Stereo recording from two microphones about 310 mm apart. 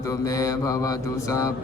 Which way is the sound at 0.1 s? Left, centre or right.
Centre.